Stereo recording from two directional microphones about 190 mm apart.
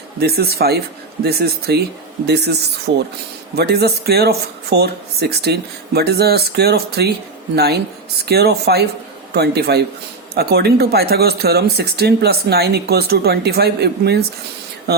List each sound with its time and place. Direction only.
0.2 s speech: 55° right (ahead or behind)